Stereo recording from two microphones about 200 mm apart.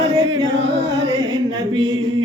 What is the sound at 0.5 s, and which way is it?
Music, 60° right (ahead or behind).